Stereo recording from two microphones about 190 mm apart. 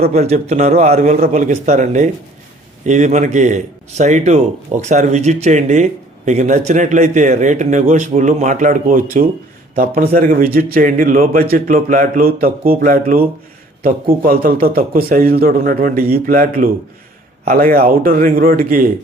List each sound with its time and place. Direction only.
0.1 s a man's voice: 35° right (ahead or behind)